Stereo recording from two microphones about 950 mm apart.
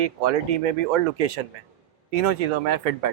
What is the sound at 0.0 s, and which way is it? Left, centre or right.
Speech, right.